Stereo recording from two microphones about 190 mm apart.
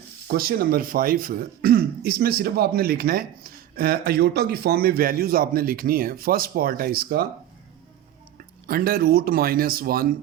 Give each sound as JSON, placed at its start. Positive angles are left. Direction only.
{"t": 0.3, "sound": "speech", "side_deg": -50}
{"t": 8.6, "sound": "speech", "side_deg": -50}